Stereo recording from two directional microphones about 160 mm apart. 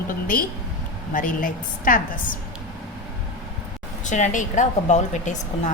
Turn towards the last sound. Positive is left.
turn(degrees=50)  # may be behind; listen again after turning